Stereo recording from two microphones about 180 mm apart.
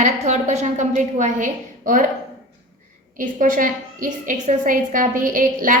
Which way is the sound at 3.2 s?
50° right (ahead or behind).